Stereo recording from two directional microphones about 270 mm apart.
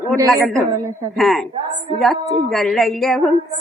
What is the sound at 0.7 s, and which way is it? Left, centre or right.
Speech, centre.